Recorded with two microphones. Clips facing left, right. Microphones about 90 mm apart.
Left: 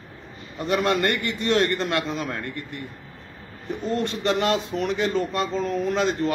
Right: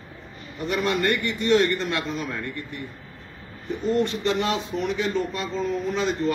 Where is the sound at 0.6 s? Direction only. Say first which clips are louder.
Left 2 dB; 65° left (ahead or behind).